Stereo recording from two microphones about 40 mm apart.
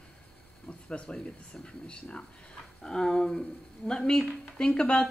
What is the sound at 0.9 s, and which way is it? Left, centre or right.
Speech, left.